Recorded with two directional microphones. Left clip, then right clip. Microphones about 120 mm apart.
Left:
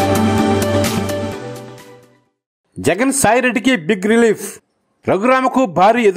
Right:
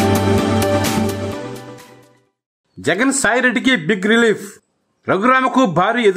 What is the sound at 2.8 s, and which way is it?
Speech, 35° left (ahead or behind).